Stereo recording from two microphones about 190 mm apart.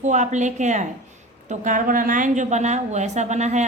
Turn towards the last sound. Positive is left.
turn(degrees=-40)  # may be behind; listen again after turning